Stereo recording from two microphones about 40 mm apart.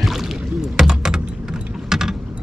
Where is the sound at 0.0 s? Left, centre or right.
Centre.